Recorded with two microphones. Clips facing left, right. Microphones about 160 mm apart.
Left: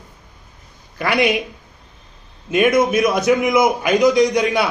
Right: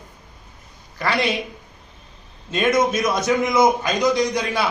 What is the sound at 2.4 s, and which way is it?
A man's voice, 10° left (ahead or behind).